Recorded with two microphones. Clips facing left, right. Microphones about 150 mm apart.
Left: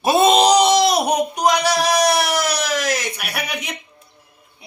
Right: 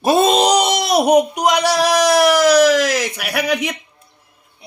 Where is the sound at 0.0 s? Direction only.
45° right (ahead or behind).